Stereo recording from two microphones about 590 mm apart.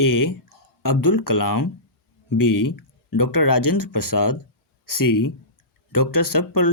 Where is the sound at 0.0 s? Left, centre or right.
Left.